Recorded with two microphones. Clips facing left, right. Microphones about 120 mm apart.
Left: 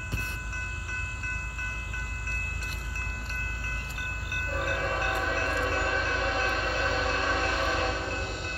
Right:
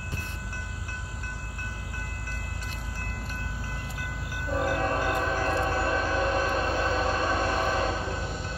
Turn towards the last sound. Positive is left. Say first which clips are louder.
# right 2 dB
turn(degrees=-45)  # may be behind; listen again after turning